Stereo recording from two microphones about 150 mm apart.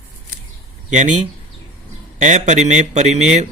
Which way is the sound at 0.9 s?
50° right (ahead or behind).